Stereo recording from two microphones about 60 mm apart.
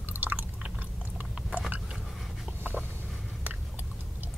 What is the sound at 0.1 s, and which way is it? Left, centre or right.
Chewing, right.